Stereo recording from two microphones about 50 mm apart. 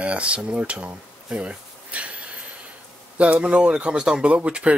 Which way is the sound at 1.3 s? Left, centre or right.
Right.